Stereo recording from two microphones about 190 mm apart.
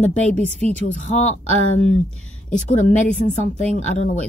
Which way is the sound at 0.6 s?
5° left (ahead or behind).